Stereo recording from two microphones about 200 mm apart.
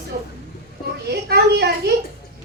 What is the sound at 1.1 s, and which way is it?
Speech, 55° right (ahead or behind).